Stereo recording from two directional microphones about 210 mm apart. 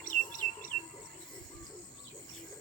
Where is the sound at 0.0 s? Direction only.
40° left (ahead or behind).